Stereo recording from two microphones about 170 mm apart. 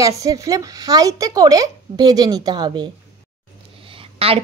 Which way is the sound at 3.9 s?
35° right (ahead or behind).